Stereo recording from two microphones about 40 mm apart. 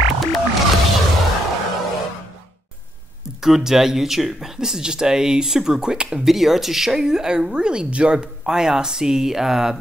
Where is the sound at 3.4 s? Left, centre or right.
Centre.